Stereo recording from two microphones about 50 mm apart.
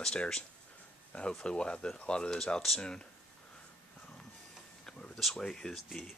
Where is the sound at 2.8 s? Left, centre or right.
Centre.